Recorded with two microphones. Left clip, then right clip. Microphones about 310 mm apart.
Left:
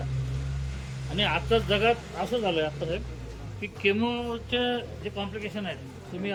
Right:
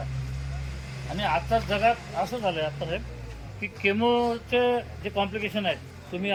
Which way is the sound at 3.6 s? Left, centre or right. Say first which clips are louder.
Right 2 dB; centre.